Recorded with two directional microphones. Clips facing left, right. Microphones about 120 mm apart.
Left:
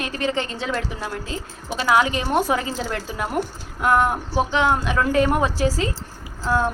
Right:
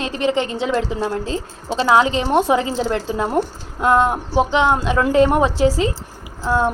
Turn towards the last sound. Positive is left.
turn(degrees=-20)  # may be behind; listen again after turning